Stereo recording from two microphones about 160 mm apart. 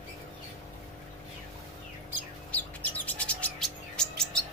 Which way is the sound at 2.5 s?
10° left (ahead or behind).